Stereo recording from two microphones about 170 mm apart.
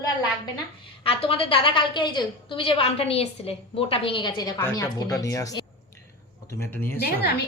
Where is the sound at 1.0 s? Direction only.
35° left (ahead or behind).